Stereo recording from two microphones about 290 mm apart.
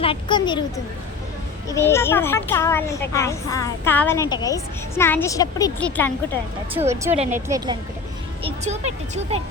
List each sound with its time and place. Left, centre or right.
0.0 s a woman's voice: centre
1.6 s a woman's voice: centre
6.7 s speech: centre
7.1 s speech: right
7.4 s speech: centre
8.4 s speech: right